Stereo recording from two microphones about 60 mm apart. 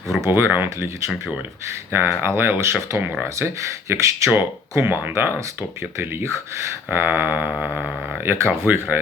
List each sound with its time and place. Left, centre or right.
0.3 s speech: right
1.9 s speech: right
3.7 s speech: right
4.7 s speech: right
7.6 s a sound: right
8.2 s speech: right